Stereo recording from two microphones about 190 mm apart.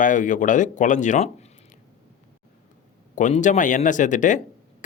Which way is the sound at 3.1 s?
40° left (ahead or behind).